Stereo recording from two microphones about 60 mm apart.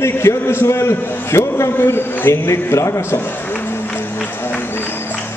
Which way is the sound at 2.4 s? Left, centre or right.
Left.